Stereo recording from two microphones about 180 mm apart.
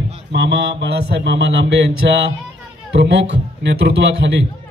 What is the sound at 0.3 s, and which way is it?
Speech, 75° right (ahead or behind).